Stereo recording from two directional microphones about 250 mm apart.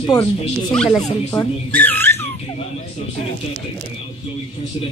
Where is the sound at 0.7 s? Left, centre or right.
Centre.